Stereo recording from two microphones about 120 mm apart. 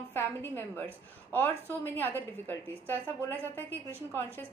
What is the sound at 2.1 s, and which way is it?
A woman's voice, 15° left (ahead or behind).